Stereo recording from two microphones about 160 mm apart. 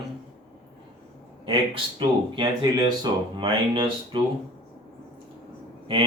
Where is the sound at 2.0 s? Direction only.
30° right (ahead or behind).